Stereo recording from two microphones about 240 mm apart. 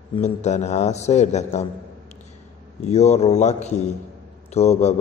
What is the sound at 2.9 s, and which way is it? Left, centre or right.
A man's voice, left.